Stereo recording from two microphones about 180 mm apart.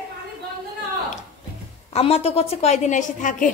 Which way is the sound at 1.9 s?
35° left (ahead or behind).